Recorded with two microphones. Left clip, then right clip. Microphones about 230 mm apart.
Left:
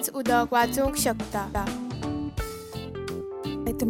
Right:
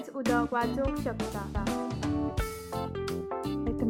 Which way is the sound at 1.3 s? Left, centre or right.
Left.